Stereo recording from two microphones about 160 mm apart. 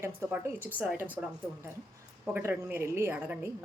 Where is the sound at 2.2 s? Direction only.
10° right (ahead or behind).